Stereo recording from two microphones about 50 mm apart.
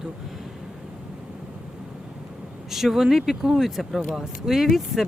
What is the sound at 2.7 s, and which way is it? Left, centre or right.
Speech, centre.